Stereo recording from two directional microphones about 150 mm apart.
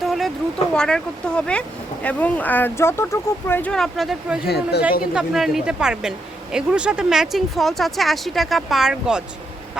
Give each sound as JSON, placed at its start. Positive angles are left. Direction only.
{"t": 0.0, "sound": "boat", "side_deg": 0}
{"t": 0.7, "sound": "speech", "side_deg": 5}
{"t": 3.7, "sound": "speech", "side_deg": 0}
{"t": 4.4, "sound": "speech", "side_deg": 90}
{"t": 5.1, "sound": "speech", "side_deg": 0}